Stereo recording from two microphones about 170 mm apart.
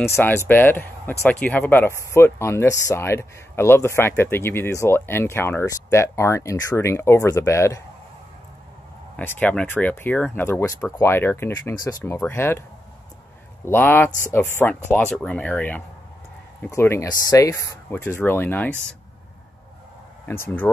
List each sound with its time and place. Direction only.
0.1 s speech: 15° left (ahead or behind)
9.1 s speech: 10° left (ahead or behind)
13.7 s speech: 10° left (ahead or behind)
20.2 s speech: 15° left (ahead or behind)